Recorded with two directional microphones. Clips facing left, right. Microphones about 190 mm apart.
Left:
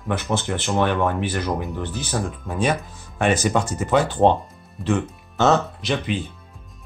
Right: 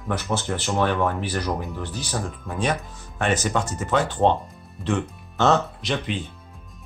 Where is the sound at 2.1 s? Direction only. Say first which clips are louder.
Left 3 dB; 5° left (ahead or behind).